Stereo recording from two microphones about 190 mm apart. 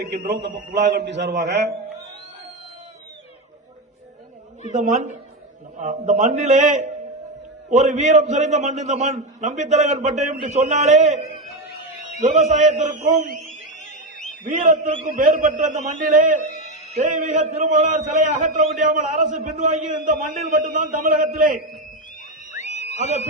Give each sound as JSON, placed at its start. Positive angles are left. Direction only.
{"t": 0.0, "sound": "a man's voice", "side_deg": -65}
{"t": 4.7, "sound": "a man's voice", "side_deg": -40}
{"t": 22.6, "sound": "a sound", "side_deg": 35}
{"t": 23.0, "sound": "a man's voice", "side_deg": -35}